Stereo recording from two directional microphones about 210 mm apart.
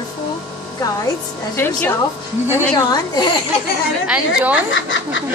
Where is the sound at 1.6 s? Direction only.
10° left (ahead or behind).